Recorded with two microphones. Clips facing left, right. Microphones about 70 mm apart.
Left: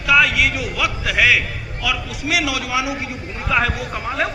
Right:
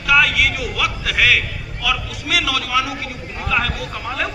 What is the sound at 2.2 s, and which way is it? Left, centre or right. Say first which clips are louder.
A man's voice: left 1 dB; centre.